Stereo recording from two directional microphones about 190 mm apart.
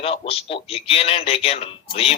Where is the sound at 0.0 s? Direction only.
30° left (ahead or behind).